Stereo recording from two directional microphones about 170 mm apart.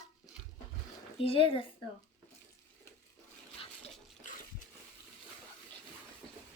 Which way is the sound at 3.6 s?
35° left (ahead or behind).